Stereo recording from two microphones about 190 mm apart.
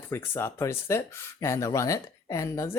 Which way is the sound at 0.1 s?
15° left (ahead or behind).